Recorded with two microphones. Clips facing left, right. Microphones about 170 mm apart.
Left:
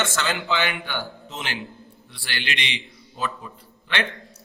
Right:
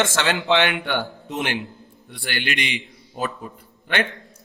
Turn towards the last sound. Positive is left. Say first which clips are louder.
# right 3 dB
turn(degrees=-45)  # may be behind; listen again after turning